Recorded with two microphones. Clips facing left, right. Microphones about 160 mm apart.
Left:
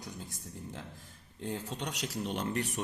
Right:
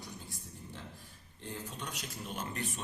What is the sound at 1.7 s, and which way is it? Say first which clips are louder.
Speech: left 6 dB; 70° left (ahead or behind).